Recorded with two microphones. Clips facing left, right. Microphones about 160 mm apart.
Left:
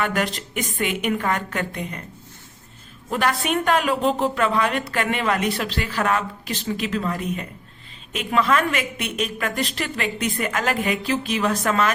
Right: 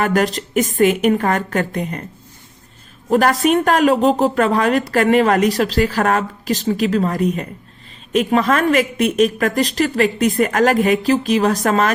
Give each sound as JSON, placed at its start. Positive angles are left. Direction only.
{"t": 0.0, "sound": "a woman's voice", "side_deg": -40}
{"t": 3.1, "sound": "a woman's voice", "side_deg": -45}